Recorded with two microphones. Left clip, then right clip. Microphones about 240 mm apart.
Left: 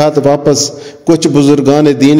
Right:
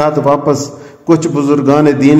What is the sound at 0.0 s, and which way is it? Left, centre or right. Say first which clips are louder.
A man's voice: left 2 dB; left.